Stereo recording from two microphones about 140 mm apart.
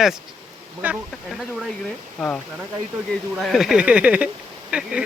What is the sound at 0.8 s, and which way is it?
Speech, 10° right (ahead or behind).